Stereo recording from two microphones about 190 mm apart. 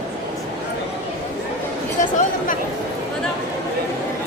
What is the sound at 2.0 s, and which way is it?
Chatter, 40° left (ahead or behind).